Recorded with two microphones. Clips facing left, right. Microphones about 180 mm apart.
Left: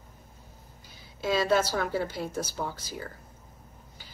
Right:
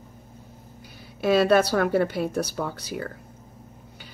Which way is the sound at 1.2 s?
65° right (ahead or behind).